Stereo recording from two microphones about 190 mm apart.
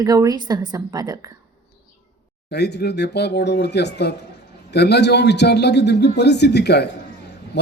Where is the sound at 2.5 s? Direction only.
60° left (ahead or behind).